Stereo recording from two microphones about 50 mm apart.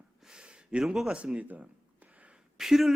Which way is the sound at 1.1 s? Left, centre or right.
Right.